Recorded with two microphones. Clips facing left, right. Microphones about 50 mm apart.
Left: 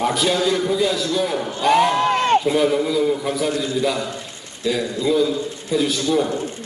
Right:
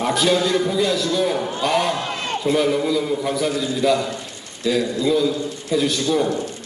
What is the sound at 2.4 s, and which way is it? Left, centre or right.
A man's voice, centre.